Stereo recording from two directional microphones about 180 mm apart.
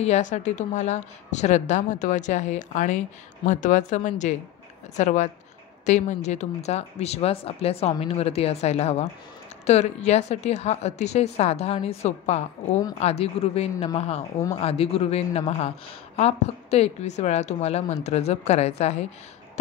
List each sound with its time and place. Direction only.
0.0 s speech: 40° left (ahead or behind)